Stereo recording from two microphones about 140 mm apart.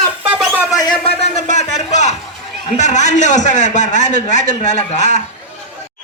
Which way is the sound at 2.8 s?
55° left (ahead or behind).